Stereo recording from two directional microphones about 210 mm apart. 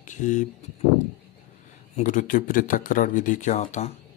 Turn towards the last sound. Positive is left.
turn(degrees=35)  # may be behind; listen again after turning